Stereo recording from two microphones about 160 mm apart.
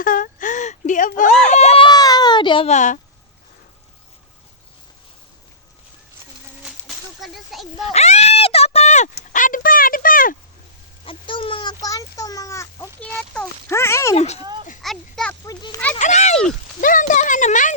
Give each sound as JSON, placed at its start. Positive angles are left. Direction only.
{"t": 0.0, "sound": "whimper", "side_deg": 60}
{"t": 1.5, "sound": "baby cry", "side_deg": 45}
{"t": 2.6, "sound": "speech", "side_deg": 50}
{"t": 6.7, "sound": "a sound", "side_deg": 0}
{"t": 7.9, "sound": "a sound", "side_deg": 45}
{"t": 11.0, "sound": "a sound", "side_deg": 35}
{"t": 13.1, "sound": "speech", "side_deg": 10}
{"t": 14.2, "sound": "speech", "side_deg": 40}
{"t": 14.8, "sound": "speech", "side_deg": 0}
{"t": 15.4, "sound": "a child's voice", "side_deg": 25}
{"t": 16.0, "sound": "speech", "side_deg": 50}